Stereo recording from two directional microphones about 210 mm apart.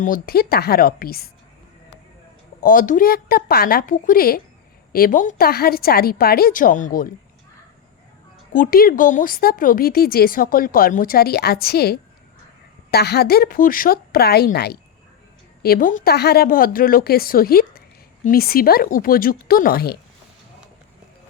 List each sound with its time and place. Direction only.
0.0 s speech: 45° left (ahead or behind)
2.6 s speech: 40° left (ahead or behind)
8.5 s speech: 40° left (ahead or behind)